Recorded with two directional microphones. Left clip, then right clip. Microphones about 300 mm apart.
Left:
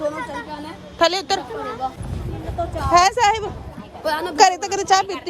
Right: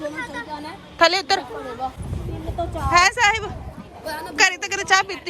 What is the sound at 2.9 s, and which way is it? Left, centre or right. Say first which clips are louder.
Speech: left 1 dB; centre.